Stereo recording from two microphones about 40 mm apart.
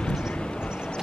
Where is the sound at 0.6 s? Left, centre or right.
Left.